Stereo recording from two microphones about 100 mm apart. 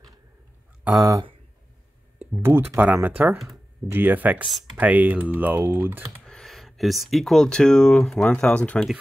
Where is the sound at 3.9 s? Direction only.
20° right (ahead or behind).